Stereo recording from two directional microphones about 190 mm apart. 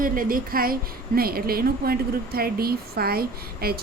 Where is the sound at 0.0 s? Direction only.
45° right (ahead or behind).